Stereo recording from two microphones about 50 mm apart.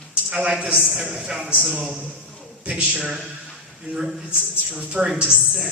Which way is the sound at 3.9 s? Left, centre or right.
Right.